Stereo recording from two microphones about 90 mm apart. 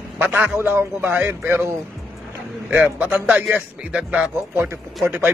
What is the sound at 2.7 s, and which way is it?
Speech, 15° right (ahead or behind).